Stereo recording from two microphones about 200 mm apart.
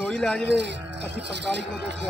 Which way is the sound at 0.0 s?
Centre (ahead or behind).